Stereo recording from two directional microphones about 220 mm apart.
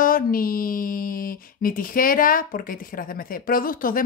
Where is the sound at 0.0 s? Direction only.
40° left (ahead or behind).